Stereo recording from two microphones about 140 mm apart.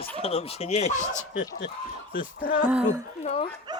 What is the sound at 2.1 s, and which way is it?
Speech, 90° left.